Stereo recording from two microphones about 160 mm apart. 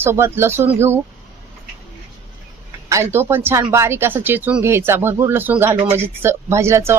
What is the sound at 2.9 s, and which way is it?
Speech, 15° right (ahead or behind).